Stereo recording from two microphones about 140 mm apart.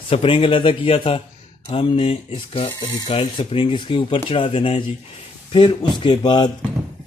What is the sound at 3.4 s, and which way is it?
A man's voice, 40° left (ahead or behind).